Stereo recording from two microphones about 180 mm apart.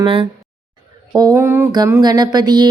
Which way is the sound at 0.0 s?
30° right (ahead or behind).